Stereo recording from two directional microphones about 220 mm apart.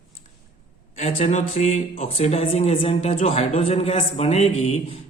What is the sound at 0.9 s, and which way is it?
Speech, 30° left (ahead or behind).